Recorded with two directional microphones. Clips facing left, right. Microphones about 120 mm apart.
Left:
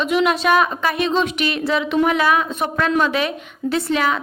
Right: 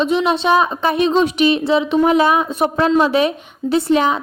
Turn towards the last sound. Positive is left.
turn(degrees=-30)  # may be behind; listen again after turning